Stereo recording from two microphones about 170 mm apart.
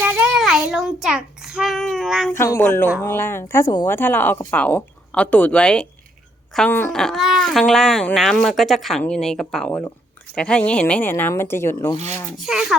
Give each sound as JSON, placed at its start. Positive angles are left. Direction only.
{"t": 0.0, "sound": "child singing", "side_deg": -10}
{"t": 2.4, "sound": "speech", "side_deg": 15}
{"t": 12.5, "sound": "speech", "side_deg": 0}